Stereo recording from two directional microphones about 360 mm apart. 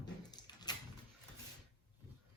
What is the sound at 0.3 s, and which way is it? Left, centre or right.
Dog, centre.